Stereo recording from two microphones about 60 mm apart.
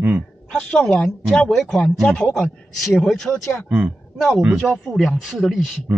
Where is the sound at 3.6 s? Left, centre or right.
Right.